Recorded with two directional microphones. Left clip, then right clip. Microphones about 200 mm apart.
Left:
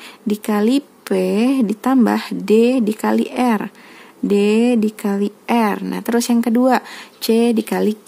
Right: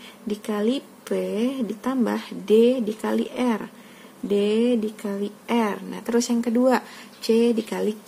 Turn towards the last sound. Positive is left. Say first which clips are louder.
# left 5 dB
turn(degrees=50)  # may be behind; listen again after turning